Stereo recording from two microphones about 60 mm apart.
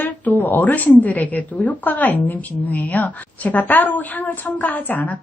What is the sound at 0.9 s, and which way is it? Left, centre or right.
A woman's voice, left.